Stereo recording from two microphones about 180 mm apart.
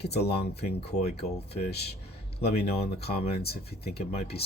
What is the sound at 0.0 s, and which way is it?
Speech, 65° left (ahead or behind).